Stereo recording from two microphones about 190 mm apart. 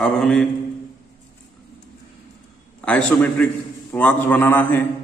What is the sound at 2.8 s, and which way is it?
A man's voice, 5° left (ahead or behind).